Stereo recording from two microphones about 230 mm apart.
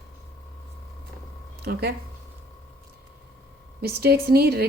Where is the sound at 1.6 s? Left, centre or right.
Right.